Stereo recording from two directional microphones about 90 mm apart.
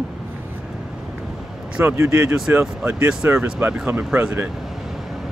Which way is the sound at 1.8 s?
25° right (ahead or behind).